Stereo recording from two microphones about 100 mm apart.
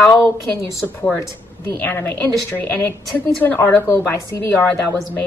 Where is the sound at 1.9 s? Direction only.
20° left (ahead or behind).